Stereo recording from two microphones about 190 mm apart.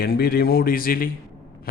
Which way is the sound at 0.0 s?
55° left (ahead or behind).